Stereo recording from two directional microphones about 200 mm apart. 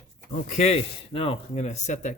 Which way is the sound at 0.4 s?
35° left (ahead or behind).